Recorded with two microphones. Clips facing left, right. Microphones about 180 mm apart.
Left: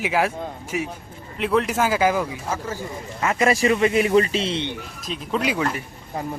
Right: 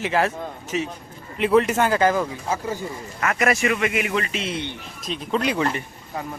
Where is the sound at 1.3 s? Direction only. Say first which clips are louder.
Right 3 dB; centre (ahead or behind).